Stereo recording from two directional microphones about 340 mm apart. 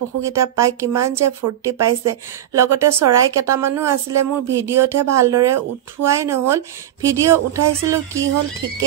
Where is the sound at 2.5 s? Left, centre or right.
Centre.